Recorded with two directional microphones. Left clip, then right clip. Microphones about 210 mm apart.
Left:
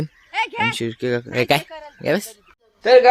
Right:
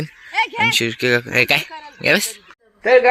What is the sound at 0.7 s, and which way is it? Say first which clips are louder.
A man's voice: right 6 dB; 10° left (ahead or behind).